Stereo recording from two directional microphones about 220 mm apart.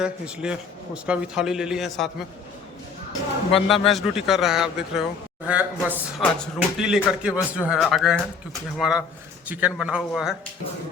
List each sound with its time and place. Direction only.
0.0 s speech: 5° right (ahead or behind)
3.7 s speech: centre (ahead or behind)